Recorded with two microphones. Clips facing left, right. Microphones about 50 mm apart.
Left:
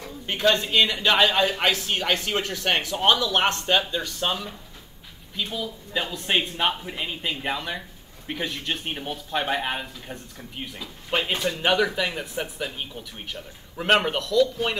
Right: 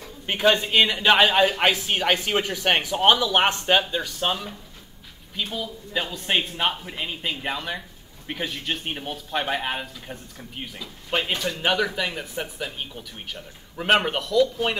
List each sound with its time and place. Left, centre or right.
0.3 s speech: centre